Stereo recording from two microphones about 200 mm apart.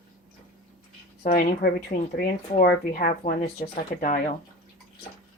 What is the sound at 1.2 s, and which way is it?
Speech, 50° left (ahead or behind).